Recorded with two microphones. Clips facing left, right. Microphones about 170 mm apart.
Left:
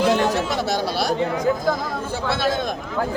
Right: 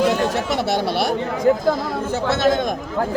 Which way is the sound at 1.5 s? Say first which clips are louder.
Right 7 dB; 65° right (ahead or behind).